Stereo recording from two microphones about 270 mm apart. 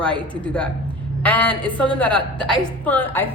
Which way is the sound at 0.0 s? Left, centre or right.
Centre.